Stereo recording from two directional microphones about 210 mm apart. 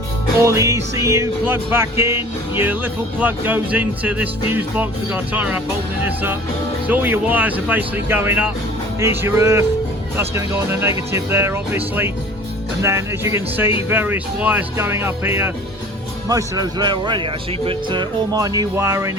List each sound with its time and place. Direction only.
0.4 s music: 15° right (ahead or behind)
6.8 s music: 10° right (ahead or behind)
16.3 s a man's voice: 20° right (ahead or behind)
17.7 s music: 20° right (ahead or behind)